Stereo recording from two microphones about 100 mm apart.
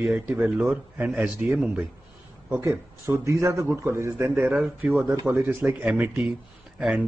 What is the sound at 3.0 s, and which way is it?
Speech, 25° right (ahead or behind).